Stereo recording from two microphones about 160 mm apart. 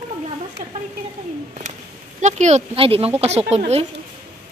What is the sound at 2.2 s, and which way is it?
Speech, 45° right (ahead or behind).